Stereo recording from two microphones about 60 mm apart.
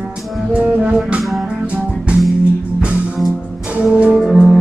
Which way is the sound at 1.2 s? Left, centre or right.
Centre.